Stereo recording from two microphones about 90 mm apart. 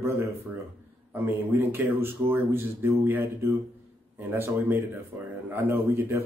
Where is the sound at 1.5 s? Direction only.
25° right (ahead or behind).